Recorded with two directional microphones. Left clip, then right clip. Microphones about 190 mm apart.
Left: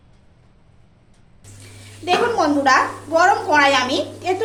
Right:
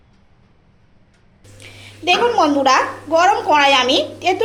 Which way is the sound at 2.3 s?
15° right (ahead or behind).